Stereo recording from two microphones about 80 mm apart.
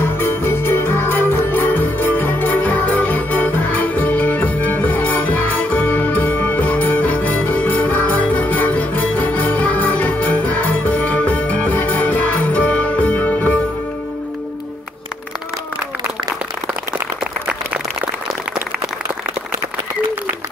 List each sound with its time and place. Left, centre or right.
0.0 s music: left